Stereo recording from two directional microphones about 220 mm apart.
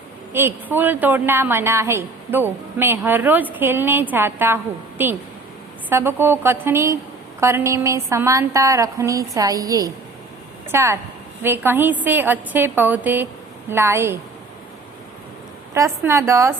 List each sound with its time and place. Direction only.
0.3 s a woman's voice: 10° right (ahead or behind)
15.7 s a woman's voice: 15° right (ahead or behind)